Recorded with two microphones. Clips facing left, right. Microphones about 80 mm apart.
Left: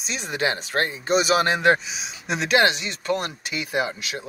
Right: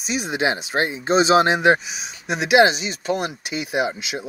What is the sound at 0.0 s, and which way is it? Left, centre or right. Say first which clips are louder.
Speech: right 3 dB; centre.